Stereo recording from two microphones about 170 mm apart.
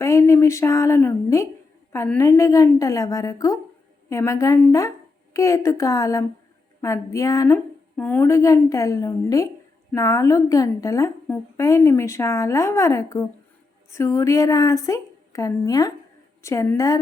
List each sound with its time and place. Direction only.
0.0 s a woman's voice: 15° left (ahead or behind)